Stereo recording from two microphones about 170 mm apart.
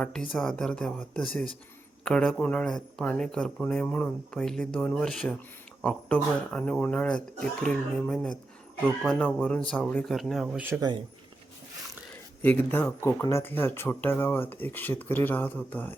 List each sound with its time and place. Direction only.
0.3 s speech: centre (ahead or behind)
10.7 s speech: 20° right (ahead or behind)
12.4 s speech: 10° left (ahead or behind)